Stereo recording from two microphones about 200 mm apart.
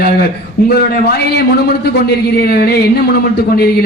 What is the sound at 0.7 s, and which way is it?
A man's voice, 55° left (ahead or behind).